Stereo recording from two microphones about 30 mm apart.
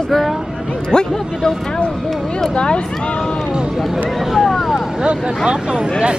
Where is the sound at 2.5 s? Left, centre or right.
Left.